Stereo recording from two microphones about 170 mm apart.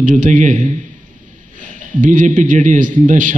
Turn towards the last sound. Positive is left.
turn(degrees=-50)  # may be behind; listen again after turning